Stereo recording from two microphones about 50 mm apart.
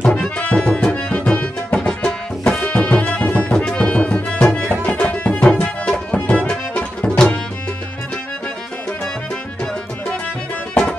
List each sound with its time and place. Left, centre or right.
0.0 s music: left
2.0 s music: centre
2.6 s music: left
6.4 s tabla: centre